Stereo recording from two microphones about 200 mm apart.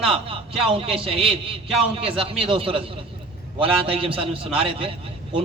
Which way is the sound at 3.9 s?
25° right (ahead or behind).